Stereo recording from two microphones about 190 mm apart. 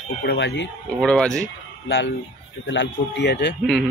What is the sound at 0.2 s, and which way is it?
Speech, 60° left (ahead or behind).